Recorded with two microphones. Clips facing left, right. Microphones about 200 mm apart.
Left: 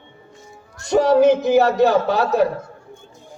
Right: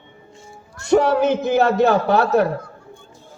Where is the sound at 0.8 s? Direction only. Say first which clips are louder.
Left 2 dB; 60° right (ahead or behind).